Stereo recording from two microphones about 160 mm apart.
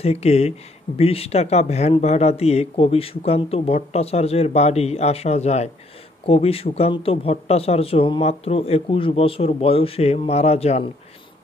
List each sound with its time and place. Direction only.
0.0 s speech: 40° left (ahead or behind)